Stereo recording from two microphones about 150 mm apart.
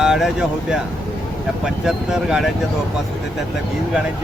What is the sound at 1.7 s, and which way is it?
Speech, 5° right (ahead or behind).